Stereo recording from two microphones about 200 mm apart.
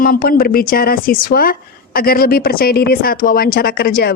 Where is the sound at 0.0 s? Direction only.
45° left (ahead or behind).